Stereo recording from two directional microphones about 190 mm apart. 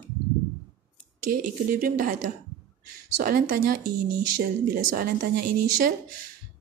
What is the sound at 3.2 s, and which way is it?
Speech, 50° right (ahead or behind).